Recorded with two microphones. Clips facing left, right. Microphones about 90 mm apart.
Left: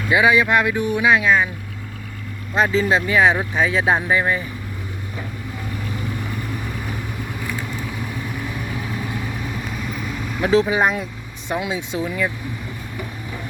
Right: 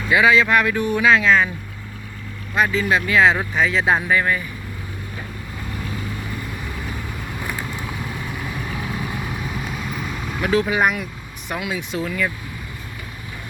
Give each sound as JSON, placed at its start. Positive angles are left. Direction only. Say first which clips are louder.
{"t": 0.1, "sound": "speech", "louder": "even", "side_deg": 20}
{"t": 2.6, "sound": "speech", "louder": "left 1 dB", "side_deg": 30}
{"t": 10.4, "sound": "speech", "louder": "left 2 dB", "side_deg": 25}